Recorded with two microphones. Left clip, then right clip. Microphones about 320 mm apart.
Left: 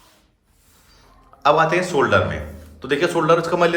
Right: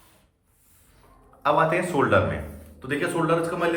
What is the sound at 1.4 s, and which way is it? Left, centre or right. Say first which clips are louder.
Speech: left 5 dB; centre.